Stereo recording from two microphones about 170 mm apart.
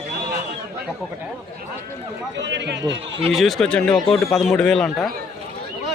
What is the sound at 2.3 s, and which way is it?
Speech, 90° right.